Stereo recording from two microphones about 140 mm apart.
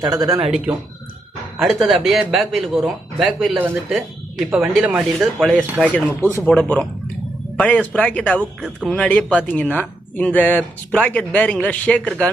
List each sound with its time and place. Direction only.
0.0 s speech: 25° right (ahead or behind)
0.3 s speech: 5° right (ahead or behind)
5.8 s speech: 10° left (ahead or behind)
7.6 s speech: 10° left (ahead or behind)